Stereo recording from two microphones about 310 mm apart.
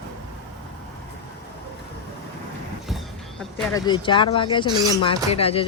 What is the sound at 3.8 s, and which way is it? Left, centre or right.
Speech, centre.